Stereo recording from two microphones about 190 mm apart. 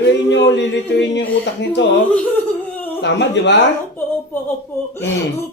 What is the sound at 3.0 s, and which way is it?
Speech, 70° left (ahead or behind).